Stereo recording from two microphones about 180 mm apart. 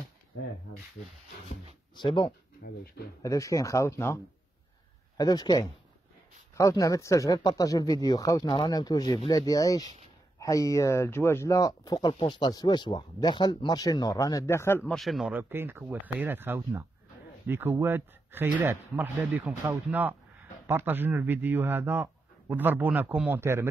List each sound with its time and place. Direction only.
2.0 s speech: 25° left (ahead or behind)
2.6 s speech: 50° left (ahead or behind)
3.2 s speech: 20° left (ahead or behind)
14.9 s speech: centre (ahead or behind)